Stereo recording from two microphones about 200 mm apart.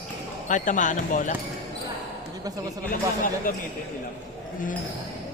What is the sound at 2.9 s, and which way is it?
Speech, 45° left (ahead or behind).